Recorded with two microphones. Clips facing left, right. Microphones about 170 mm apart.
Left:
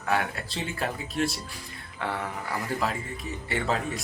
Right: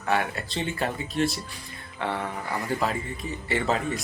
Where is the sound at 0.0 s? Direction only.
Centre (ahead or behind).